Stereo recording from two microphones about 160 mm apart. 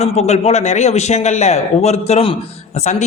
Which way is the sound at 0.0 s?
40° left (ahead or behind).